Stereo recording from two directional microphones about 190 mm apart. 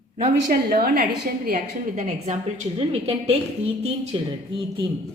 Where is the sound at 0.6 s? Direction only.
50° right (ahead or behind).